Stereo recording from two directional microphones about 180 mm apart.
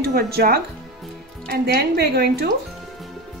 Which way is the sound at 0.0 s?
55° right (ahead or behind).